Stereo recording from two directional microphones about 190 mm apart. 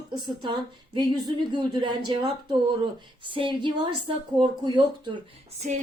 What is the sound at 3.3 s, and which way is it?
A woman's voice, 25° right (ahead or behind).